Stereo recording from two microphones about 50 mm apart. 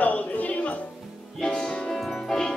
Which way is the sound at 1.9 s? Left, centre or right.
Centre.